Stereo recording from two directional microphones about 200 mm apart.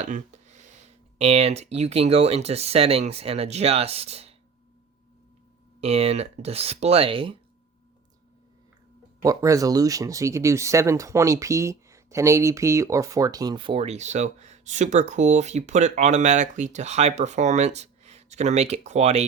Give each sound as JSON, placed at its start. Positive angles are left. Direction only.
{"t": 0.0, "sound": "a sound", "side_deg": -35}
{"t": 1.2, "sound": "speech", "side_deg": -30}
{"t": 5.8, "sound": "speech", "side_deg": -30}
{"t": 9.2, "sound": "speech", "side_deg": -15}